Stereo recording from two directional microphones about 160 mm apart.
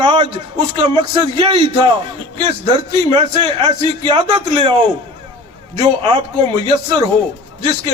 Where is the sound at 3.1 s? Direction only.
30° right (ahead or behind).